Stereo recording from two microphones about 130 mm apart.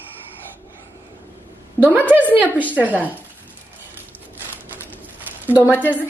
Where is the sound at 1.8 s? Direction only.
15° right (ahead or behind).